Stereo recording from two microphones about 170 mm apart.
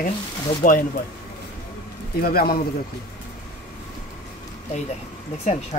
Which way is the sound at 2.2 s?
60° left (ahead or behind).